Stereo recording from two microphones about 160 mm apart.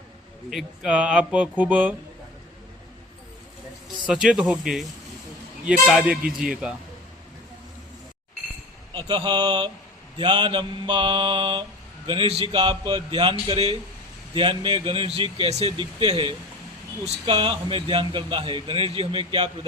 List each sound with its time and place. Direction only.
0.5 s speech: 5° right (ahead or behind)
4.0 s speech: 5° right (ahead or behind)
8.9 s a man's voice: 30° right (ahead or behind)